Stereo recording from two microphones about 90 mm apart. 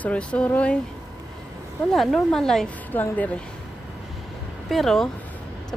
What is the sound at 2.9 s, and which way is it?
Speech, 20° left (ahead or behind).